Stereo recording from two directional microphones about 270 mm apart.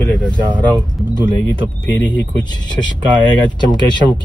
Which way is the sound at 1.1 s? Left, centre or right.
Centre.